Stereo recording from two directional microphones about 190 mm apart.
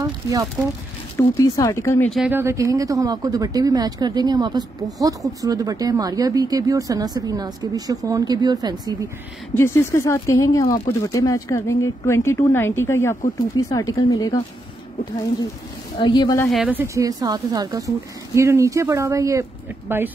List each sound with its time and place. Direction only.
0.0 s speech: 20° right (ahead or behind)
1.1 s speech: 15° left (ahead or behind)
2.1 s speech: 5° right (ahead or behind)
2.4 s speech: 15° right (ahead or behind)
9.5 s a woman's voice: 15° left (ahead or behind)
16.0 s a woman's voice: 20° left (ahead or behind)
16.5 s speech: 10° right (ahead or behind)